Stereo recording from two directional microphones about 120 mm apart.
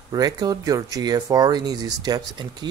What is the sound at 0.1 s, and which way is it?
Speech, 30° right (ahead or behind).